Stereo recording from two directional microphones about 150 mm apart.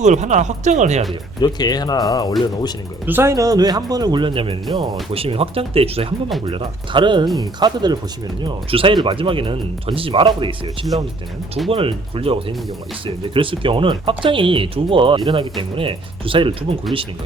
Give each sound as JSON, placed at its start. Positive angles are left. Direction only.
{"t": 0.0, "sound": "speech", "side_deg": -50}
{"t": 1.4, "sound": "speech", "side_deg": 25}
{"t": 3.1, "sound": "a man's voice", "side_deg": -15}
{"t": 11.7, "sound": "speech", "side_deg": -40}